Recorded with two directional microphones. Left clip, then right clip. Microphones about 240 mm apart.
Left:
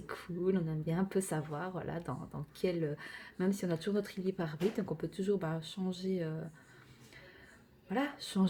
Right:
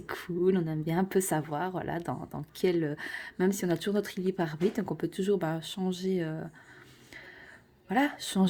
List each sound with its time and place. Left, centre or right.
0.1 s speech: right
7.9 s speech: right